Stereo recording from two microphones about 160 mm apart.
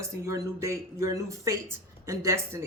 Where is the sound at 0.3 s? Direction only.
20° right (ahead or behind).